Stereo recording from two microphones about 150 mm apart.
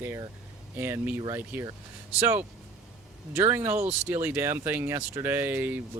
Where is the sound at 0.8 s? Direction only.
15° right (ahead or behind).